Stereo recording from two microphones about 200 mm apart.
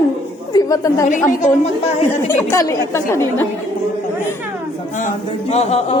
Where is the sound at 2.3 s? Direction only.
15° left (ahead or behind).